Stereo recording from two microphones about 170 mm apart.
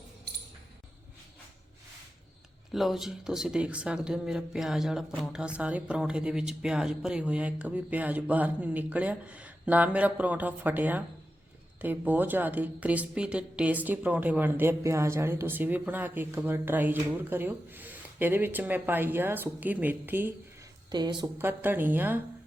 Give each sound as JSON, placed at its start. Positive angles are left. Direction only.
{"t": 2.7, "sound": "a woman's voice", "side_deg": 0}
{"t": 20.9, "sound": "a woman's voice", "side_deg": -25}
{"t": 21.3, "sound": "a woman's voice", "side_deg": -10}